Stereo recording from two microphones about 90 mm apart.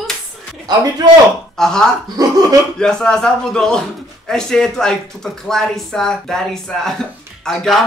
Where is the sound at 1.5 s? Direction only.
5° left (ahead or behind).